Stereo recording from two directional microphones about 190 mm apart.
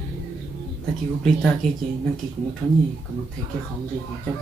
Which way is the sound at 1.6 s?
5° left (ahead or behind).